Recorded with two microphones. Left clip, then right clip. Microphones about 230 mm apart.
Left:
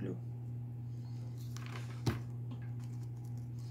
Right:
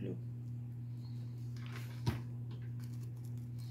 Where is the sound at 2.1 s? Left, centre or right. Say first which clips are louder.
Left 3 dB; left.